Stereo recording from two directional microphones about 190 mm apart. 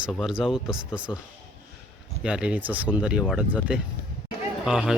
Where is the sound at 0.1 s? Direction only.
Centre (ahead or behind).